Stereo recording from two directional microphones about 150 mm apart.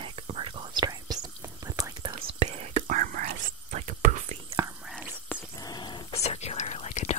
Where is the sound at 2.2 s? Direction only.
45° right (ahead or behind).